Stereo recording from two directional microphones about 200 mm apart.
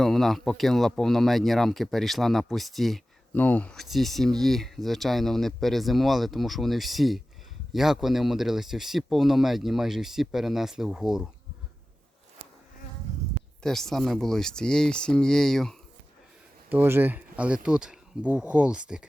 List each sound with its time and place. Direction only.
0.0 s speech: centre (ahead or behind)
13.6 s speech: centre (ahead or behind)
16.6 s speech: 10° right (ahead or behind)